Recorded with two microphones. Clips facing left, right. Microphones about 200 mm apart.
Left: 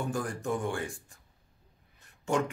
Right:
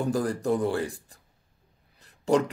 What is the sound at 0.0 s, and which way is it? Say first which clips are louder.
Speech: right 7 dB; 35° right (ahead or behind).